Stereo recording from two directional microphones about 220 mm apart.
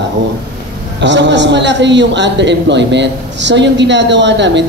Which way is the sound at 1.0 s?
55° right (ahead or behind).